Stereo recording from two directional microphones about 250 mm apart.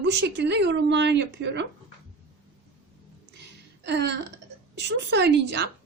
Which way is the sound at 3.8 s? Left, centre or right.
Right.